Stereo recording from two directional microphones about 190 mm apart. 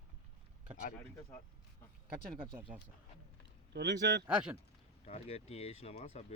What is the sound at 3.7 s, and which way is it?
Speech, 65° right (ahead or behind).